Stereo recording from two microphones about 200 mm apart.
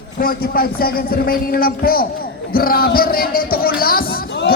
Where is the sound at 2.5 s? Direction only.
45° left (ahead or behind).